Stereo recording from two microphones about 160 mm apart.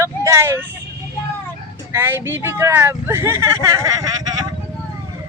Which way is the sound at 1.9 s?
15° right (ahead or behind).